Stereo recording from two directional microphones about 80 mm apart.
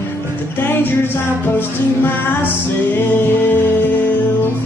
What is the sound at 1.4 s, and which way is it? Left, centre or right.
Music, left.